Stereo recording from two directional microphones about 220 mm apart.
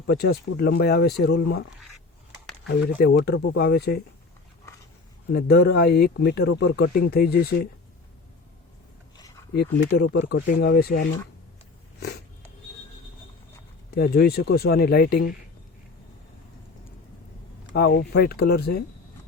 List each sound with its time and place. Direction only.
0.1 s speech: 45° left (ahead or behind)
3.0 s speech: 45° left (ahead or behind)
5.3 s speech: 45° left (ahead or behind)
9.6 s speech: 45° left (ahead or behind)
11.9 s a sound: 50° left (ahead or behind)
13.9 s speech: 45° left (ahead or behind)
17.7 s speech: 45° left (ahead or behind)